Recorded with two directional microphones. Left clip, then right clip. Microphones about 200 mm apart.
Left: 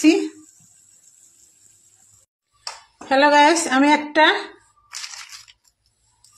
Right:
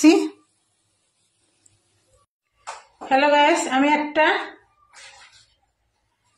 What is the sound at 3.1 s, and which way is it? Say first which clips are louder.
A woman's voice: left 2 dB; 50° left (ahead or behind).